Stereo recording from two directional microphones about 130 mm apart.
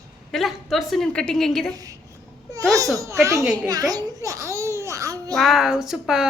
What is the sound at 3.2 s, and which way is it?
Speech, 25° right (ahead or behind).